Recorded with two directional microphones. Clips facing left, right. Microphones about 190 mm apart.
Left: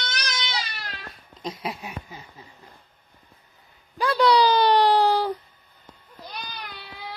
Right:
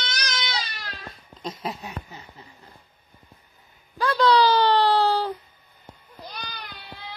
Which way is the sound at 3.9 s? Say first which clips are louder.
Even; 15° left (ahead or behind).